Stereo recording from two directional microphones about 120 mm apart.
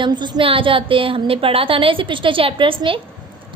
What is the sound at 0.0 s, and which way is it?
A woman's voice, 40° right (ahead or behind).